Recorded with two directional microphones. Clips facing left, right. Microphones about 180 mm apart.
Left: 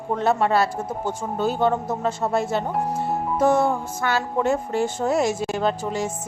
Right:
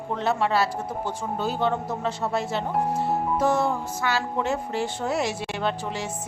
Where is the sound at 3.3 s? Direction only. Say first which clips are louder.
Left 6 dB; 50° left (ahead or behind).